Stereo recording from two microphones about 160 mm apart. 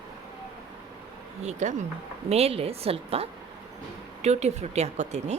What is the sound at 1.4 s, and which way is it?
A woman's voice, 45° right (ahead or behind).